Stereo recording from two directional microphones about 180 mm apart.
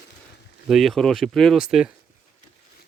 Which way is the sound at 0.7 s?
Centre (ahead or behind).